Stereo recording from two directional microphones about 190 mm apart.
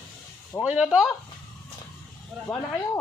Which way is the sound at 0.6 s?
5° right (ahead or behind).